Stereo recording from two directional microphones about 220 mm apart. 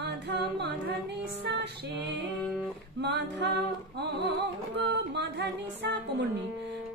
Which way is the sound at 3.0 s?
50° right (ahead or behind).